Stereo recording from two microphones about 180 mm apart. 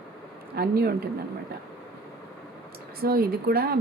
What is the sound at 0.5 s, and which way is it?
Speech, 60° right (ahead or behind).